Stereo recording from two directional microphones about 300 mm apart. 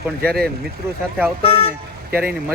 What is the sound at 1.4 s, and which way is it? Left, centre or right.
Speech, centre.